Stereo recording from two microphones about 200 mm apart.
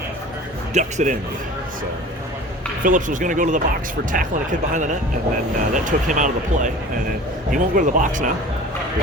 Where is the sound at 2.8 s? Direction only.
40° right (ahead or behind).